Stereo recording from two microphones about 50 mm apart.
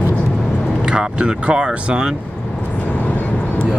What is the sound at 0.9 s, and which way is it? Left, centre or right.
Speech, centre.